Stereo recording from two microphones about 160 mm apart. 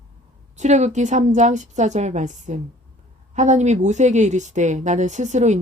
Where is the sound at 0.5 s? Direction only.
45° right (ahead or behind).